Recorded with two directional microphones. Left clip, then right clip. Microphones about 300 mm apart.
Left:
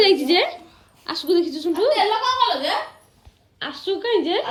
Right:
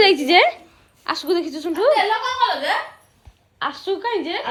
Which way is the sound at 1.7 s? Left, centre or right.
Right.